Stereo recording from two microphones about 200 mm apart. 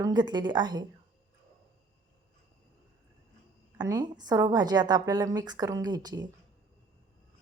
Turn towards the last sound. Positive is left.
turn(degrees=-20)  # may be behind; listen again after turning